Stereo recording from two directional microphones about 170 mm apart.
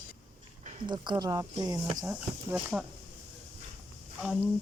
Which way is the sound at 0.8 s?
25° right (ahead or behind).